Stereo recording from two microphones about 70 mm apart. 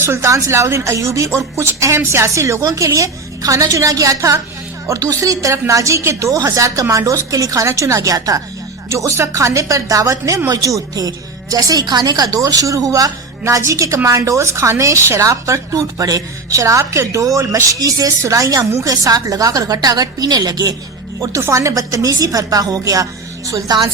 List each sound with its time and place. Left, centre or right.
0.0 s a woman's voice: right
8.9 s a woman's voice: right
21.5 s a woman's voice: right